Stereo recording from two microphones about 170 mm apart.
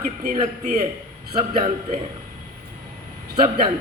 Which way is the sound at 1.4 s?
40° right (ahead or behind).